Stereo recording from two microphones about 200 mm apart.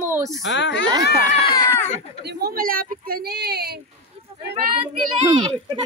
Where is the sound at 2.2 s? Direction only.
50° right (ahead or behind).